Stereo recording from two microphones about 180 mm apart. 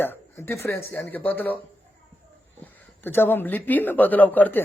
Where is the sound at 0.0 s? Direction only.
10° left (ahead or behind).